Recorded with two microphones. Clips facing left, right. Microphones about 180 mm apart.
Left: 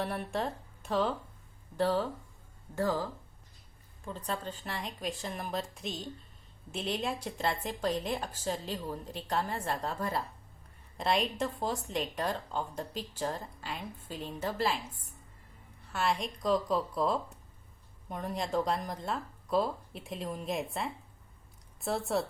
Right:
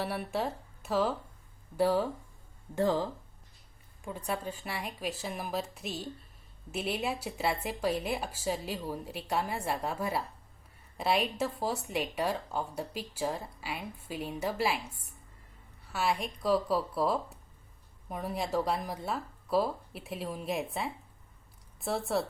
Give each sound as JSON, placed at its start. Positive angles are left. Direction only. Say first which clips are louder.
{"t": 0.0, "sound": "speech", "louder": "right 1 dB", "side_deg": -5}
{"t": 2.7, "sound": "speech", "louder": "right 3 dB", "side_deg": -20}
{"t": 4.0, "sound": "speech", "louder": "right 2 dB", "side_deg": -10}